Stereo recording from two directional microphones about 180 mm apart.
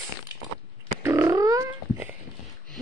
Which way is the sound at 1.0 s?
15° right (ahead or behind).